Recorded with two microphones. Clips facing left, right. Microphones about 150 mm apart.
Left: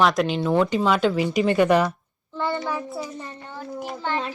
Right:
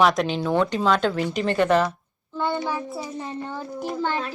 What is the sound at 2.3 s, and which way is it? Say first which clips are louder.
Speech: right 1 dB; 5° right (ahead or behind).